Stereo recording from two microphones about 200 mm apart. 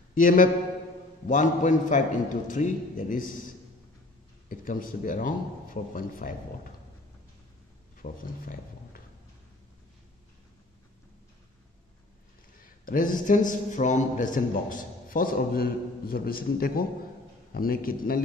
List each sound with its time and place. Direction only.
0.1 s a sound: 45° left (ahead or behind)
1.2 s a man's voice: 40° left (ahead or behind)
4.5 s a man's voice: 45° left (ahead or behind)
8.0 s speech: 45° left (ahead or behind)
12.8 s a man's voice: 40° left (ahead or behind)